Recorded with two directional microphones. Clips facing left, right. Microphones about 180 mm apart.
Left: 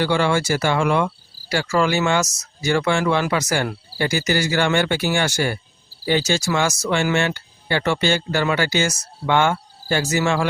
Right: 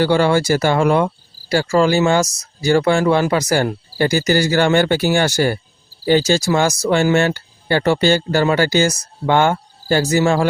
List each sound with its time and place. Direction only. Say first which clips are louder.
0.0 s speech: right 5 dB; 40° right (ahead or behind)